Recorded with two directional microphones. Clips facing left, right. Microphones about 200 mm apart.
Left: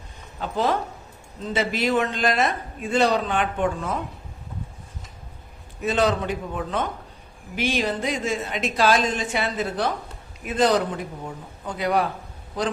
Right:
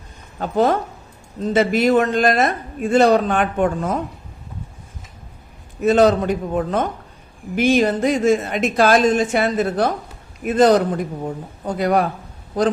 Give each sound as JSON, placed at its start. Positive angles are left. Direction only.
{"t": 0.3, "sound": "speech", "side_deg": -50}
{"t": 5.8, "sound": "speech", "side_deg": -45}